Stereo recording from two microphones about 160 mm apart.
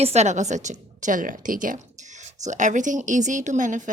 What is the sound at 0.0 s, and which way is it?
A woman's voice, 45° right (ahead or behind).